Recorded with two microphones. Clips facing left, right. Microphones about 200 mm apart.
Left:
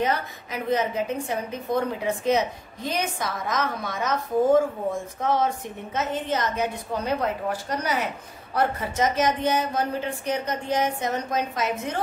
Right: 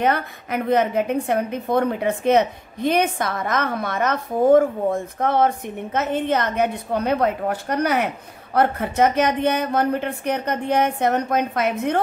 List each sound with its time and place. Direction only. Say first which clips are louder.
0.0 s a woman's voice: right 4 dB; 60° right (ahead or behind)